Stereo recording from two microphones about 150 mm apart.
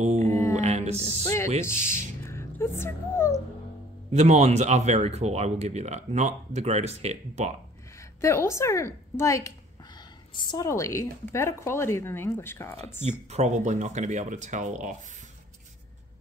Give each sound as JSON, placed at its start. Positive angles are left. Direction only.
{"t": 0.0, "sound": "music", "side_deg": -50}
{"t": 0.3, "sound": "music", "side_deg": 20}
{"t": 0.6, "sound": "music", "side_deg": -45}
{"t": 2.2, "sound": "speech", "side_deg": 15}
{"t": 4.1, "sound": "speech", "side_deg": -50}
{"t": 8.2, "sound": "a woman's voice", "side_deg": 20}
{"t": 13.3, "sound": "speech", "side_deg": -50}